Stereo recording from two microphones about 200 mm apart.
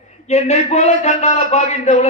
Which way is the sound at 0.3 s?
35° left (ahead or behind).